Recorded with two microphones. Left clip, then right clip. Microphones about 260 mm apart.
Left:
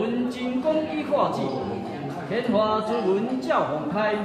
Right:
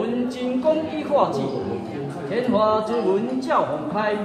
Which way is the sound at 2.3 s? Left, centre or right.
Centre.